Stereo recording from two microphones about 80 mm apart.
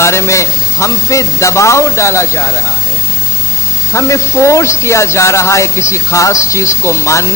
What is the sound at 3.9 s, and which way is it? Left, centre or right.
A man's voice, left.